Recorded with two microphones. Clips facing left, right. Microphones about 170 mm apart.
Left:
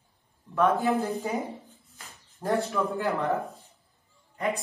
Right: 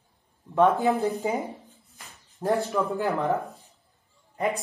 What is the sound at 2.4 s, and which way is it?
Speech, centre (ahead or behind).